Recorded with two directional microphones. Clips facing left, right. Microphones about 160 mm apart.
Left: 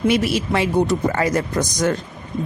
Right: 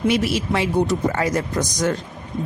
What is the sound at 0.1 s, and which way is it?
Speech, 55° left (ahead or behind).